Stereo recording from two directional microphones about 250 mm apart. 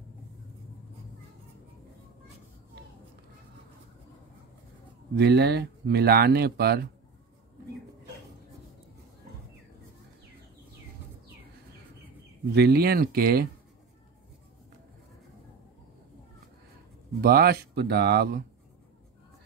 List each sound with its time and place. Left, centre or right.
5.1 s speech: right
12.5 s speech: right
17.2 s speech: right